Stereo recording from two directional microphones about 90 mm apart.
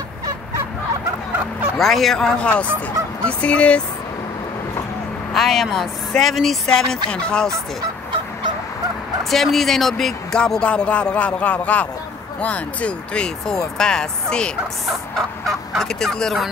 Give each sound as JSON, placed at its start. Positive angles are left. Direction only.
{"t": 1.8, "sound": "speech", "side_deg": 0}
{"t": 5.3, "sound": "speech", "side_deg": 0}
{"t": 9.3, "sound": "speech", "side_deg": 0}